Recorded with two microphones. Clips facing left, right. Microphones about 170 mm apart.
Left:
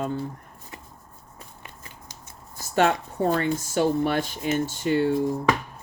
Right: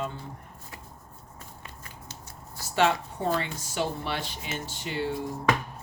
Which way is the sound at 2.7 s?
50° left (ahead or behind).